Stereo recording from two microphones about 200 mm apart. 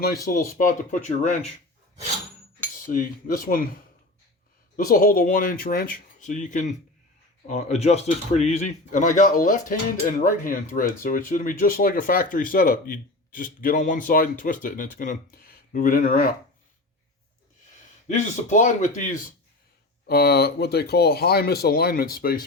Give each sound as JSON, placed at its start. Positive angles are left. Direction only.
{"t": 0.0, "sound": "speech", "side_deg": 45}
{"t": 2.9, "sound": "speech", "side_deg": 45}
{"t": 4.9, "sound": "speech", "side_deg": 45}
{"t": 18.1, "sound": "speech", "side_deg": 40}
{"t": 20.1, "sound": "speech", "side_deg": 50}